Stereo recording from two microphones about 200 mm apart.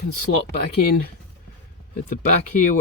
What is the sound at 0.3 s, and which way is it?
Speech, 80° left.